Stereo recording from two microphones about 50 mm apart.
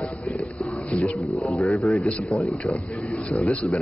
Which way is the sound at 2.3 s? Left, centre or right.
Left.